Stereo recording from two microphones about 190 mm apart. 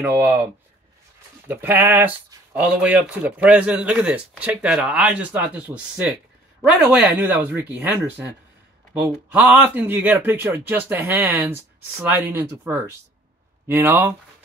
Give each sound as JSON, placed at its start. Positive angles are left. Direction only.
{"t": 0.0, "sound": "speech", "side_deg": -10}
{"t": 1.5, "sound": "speech", "side_deg": -10}
{"t": 6.9, "sound": "speech", "side_deg": -5}
{"t": 9.3, "sound": "speech", "side_deg": -5}